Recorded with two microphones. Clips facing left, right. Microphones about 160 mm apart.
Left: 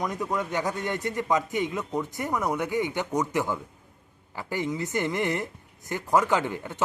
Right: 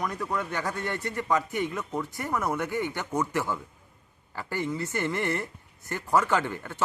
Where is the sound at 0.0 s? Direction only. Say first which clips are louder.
Left 2 dB; 20° left (ahead or behind).